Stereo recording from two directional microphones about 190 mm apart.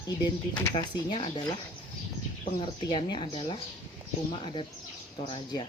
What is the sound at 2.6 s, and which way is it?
Speech, 25° left (ahead or behind).